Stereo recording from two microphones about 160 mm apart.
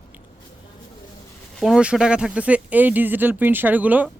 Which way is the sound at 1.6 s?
5° right (ahead or behind).